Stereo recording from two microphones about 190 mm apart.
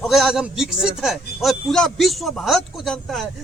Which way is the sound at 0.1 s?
Centre (ahead or behind).